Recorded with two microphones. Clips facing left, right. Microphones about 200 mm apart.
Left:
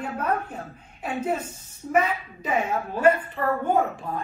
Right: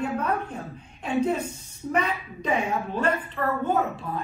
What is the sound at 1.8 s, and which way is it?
A woman's voice, 5° left (ahead or behind).